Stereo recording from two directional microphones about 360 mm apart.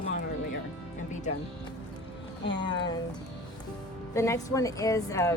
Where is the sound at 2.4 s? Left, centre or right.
Left.